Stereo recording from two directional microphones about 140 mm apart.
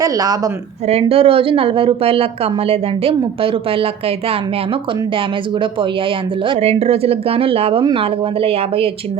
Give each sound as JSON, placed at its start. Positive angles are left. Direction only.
{"t": 0.0, "sound": "speech", "side_deg": -25}
{"t": 0.9, "sound": "a woman's voice", "side_deg": -45}
{"t": 6.6, "sound": "a woman's voice", "side_deg": -50}